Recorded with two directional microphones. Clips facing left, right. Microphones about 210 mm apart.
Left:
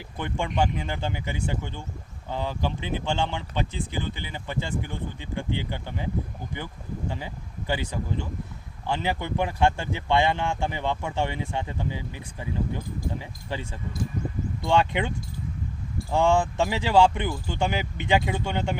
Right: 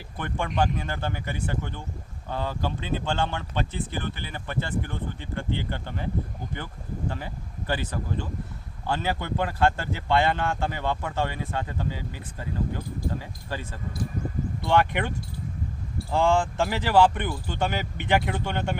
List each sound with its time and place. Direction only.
0.2 s speech: 20° left (ahead or behind)
7.1 s speech: 15° left (ahead or behind)
16.1 s speech: 20° left (ahead or behind)